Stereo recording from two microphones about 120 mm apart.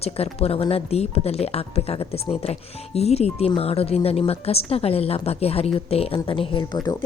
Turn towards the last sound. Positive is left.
turn(degrees=40)  # may be behind; listen again after turning